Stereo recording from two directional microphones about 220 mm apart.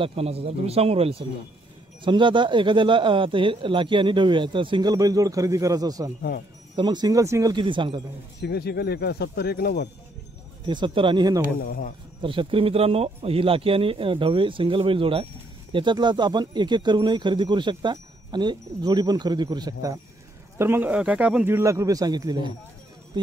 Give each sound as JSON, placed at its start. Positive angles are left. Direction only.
{"t": 0.0, "sound": "speech", "side_deg": -25}
{"t": 8.4, "sound": "speech", "side_deg": 45}
{"t": 10.7, "sound": "speech", "side_deg": -20}
{"t": 11.6, "sound": "speech", "side_deg": 40}
{"t": 12.2, "sound": "speech", "side_deg": -25}